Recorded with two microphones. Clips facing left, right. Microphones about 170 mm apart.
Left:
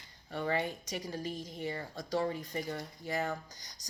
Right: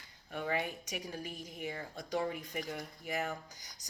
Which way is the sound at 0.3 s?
10° right (ahead or behind).